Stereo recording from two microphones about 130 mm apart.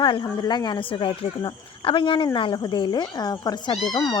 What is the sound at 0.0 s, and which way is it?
A woman's voice, 40° left (ahead or behind).